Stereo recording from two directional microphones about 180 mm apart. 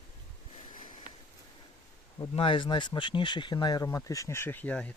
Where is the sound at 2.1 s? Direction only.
30° left (ahead or behind); by 4.9 s 10° left (ahead or behind).